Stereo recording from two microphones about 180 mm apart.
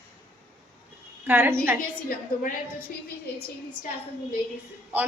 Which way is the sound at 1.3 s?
10° right (ahead or behind).